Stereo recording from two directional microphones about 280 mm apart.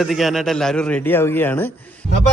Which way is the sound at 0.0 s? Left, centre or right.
Centre.